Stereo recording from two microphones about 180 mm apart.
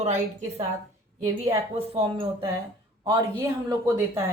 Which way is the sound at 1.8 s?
30° right (ahead or behind).